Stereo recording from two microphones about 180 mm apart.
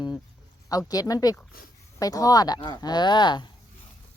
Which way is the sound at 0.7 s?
20° left (ahead or behind).